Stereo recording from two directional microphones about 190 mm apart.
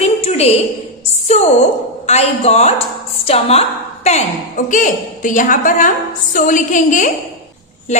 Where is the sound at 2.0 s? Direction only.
35° left (ahead or behind).